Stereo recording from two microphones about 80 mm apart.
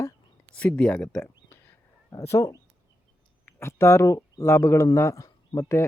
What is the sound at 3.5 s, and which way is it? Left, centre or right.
Speech, left.